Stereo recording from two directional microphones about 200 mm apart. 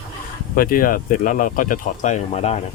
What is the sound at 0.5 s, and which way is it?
Speech, 45° left (ahead or behind).